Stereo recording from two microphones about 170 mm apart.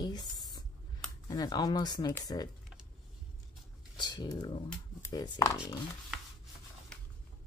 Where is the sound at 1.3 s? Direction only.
25° left (ahead or behind).